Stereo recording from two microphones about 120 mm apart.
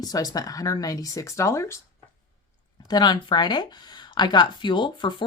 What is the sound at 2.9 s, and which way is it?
Speech, 35° left (ahead or behind).